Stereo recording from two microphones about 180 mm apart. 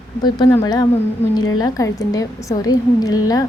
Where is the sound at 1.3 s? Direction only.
20° left (ahead or behind).